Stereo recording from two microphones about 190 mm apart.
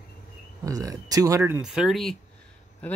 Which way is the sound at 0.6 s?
15° right (ahead or behind).